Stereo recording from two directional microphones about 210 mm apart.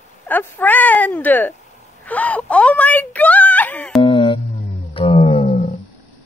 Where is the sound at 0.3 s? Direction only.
10° left (ahead or behind).